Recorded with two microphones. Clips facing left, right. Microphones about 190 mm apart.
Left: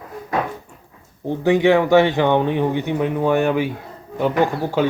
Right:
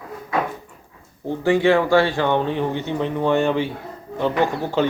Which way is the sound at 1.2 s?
15° left (ahead or behind).